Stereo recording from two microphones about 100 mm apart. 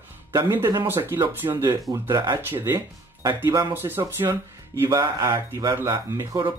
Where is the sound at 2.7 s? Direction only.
45° right (ahead or behind).